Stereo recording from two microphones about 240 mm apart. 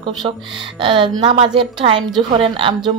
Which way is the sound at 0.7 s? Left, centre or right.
Centre.